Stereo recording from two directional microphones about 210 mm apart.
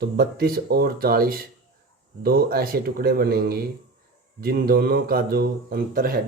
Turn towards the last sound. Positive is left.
turn(degrees=-45)  # may be behind; listen again after turning